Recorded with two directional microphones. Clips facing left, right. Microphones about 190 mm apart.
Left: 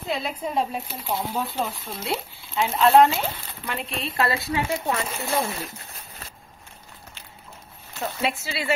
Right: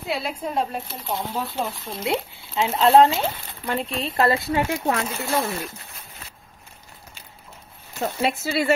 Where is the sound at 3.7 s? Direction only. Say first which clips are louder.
Right 5 dB; 45° right (ahead or behind).